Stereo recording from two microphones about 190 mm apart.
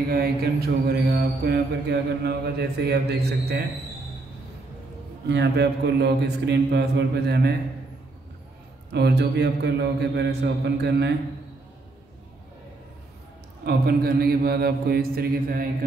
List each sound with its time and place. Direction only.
0.1 s mantra: 55° right (ahead or behind)
5.3 s mantra: 65° right (ahead or behind)
8.9 s mantra: 60° right (ahead or behind)
13.7 s speech: 55° right (ahead or behind)